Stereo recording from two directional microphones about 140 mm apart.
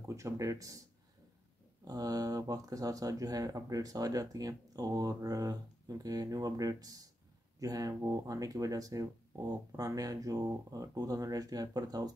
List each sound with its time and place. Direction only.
0.0 s speech: 20° right (ahead or behind)
1.9 s speech: 25° right (ahead or behind)